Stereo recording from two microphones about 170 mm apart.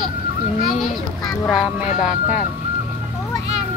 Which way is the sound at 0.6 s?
Centre (ahead or behind).